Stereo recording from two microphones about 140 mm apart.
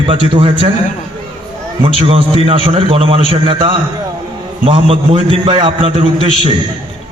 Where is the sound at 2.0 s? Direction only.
40° right (ahead or behind).